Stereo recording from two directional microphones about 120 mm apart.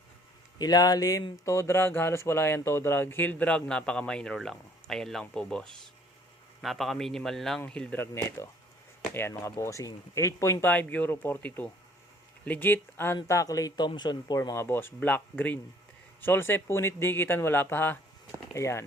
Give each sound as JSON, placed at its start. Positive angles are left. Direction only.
{"t": 0.6, "sound": "a man's voice", "side_deg": 35}
{"t": 8.0, "sound": "speech", "side_deg": 20}